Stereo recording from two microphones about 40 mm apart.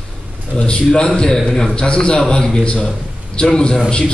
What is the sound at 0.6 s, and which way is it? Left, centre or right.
A man's voice, left.